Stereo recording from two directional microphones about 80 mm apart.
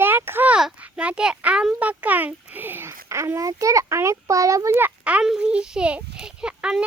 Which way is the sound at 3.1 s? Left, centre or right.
Right.